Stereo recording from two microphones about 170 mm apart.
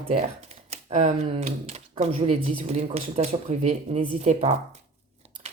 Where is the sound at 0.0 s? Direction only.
40° right (ahead or behind).